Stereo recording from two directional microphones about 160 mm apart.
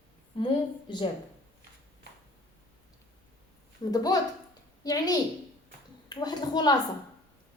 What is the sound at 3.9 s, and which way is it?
A woman's voice, 25° left (ahead or behind).